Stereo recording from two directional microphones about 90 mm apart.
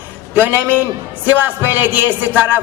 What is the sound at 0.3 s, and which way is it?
A man's voice, 20° right (ahead or behind).